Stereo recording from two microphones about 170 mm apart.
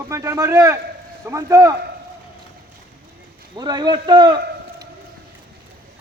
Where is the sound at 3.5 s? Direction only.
25° right (ahead or behind).